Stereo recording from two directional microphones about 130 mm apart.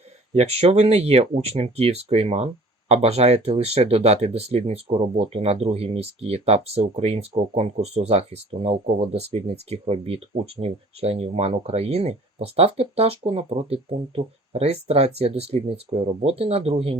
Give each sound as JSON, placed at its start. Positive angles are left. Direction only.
{"t": 0.3, "sound": "speech", "side_deg": -55}